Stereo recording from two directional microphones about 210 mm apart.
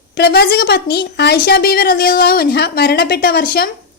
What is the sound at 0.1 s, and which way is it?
A woman's voice, 50° left (ahead or behind).